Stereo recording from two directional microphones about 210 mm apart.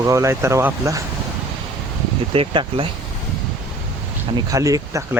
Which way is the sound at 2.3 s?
25° right (ahead or behind).